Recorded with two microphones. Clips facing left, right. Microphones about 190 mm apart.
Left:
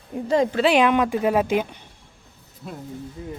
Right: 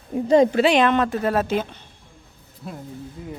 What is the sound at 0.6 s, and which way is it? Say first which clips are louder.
Speech: even; 5° left (ahead or behind).